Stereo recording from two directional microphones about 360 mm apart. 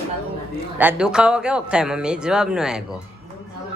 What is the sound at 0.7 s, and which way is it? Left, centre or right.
Speech, centre.